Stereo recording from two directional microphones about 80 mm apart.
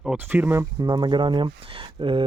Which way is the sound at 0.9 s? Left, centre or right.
Right.